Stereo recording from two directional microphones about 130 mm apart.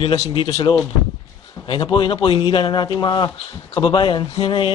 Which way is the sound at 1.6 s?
40° left (ahead or behind).